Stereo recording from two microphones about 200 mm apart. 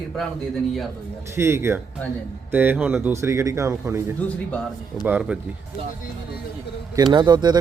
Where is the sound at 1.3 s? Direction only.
10° right (ahead or behind).